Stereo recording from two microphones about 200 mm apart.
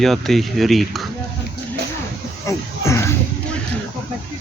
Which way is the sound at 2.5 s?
15° left (ahead or behind).